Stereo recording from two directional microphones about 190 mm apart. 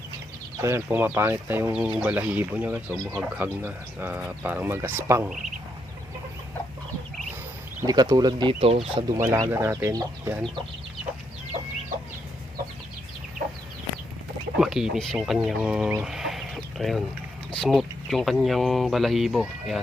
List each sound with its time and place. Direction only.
0.6 s speech: 10° right (ahead or behind)
2.9 s speech: 5° left (ahead or behind)
3.3 s speech: 10° right (ahead or behind)
7.8 s speech: 20° right (ahead or behind)
9.1 s speech: 15° right (ahead or behind)
14.6 s a sound: centre (ahead or behind)
14.9 s speech: centre (ahead or behind)